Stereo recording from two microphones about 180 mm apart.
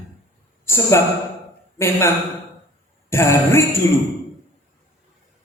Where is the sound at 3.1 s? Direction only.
15° left (ahead or behind).